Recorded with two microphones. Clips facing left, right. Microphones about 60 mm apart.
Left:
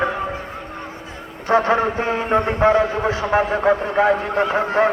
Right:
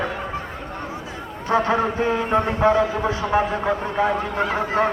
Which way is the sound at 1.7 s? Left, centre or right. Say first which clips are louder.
Left 2 dB; centre.